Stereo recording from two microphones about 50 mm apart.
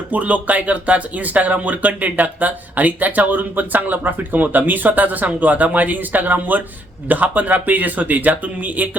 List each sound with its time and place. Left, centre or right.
0.1 s speech: right